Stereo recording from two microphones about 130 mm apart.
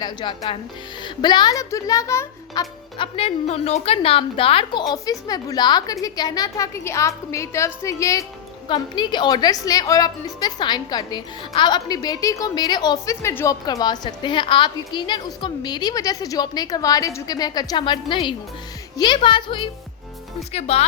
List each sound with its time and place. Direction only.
0.0 s a woman's voice: 35° left (ahead or behind)
3.0 s a woman's voice: 50° left (ahead or behind)
4.9 s a woman's voice: 30° left (ahead or behind)
8.6 s a woman's voice: 35° left (ahead or behind)
13.2 s a woman's voice: 20° left (ahead or behind); by 19.7 s 40° left (ahead or behind)
20.5 s speech: 55° left (ahead or behind)